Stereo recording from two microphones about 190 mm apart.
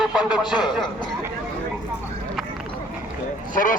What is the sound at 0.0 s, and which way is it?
Speech, 5° right (ahead or behind).